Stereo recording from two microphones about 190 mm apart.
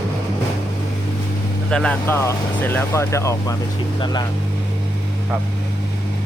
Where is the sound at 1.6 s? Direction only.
5° left (ahead or behind); by 4.2 s 20° left (ahead or behind).